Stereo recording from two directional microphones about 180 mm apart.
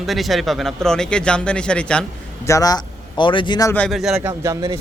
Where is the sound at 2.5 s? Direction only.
20° left (ahead or behind).